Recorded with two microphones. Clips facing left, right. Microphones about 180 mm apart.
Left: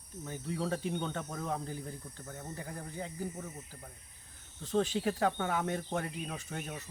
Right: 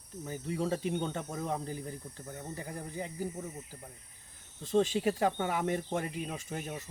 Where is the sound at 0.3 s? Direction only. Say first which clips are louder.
Right 2 dB; 10° right (ahead or behind).